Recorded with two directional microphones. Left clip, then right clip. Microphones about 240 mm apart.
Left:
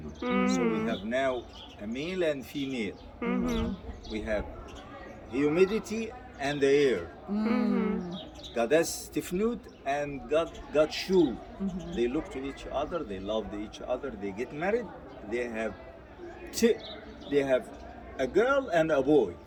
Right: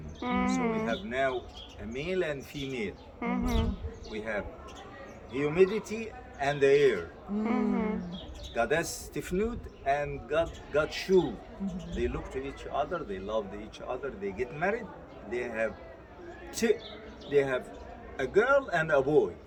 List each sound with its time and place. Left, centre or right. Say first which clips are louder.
0.2 s a man's voice: left 2 dB; centre
4.1 s a man's voice: left 2 dB; centre
7.4 s a man's voice: left 1 dB; centre
17.3 s a man's voice: left 1 dB; centre